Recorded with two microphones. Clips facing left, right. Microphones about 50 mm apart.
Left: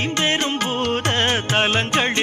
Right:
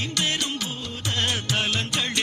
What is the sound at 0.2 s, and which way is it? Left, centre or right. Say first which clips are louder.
Music: left 6 dB; left.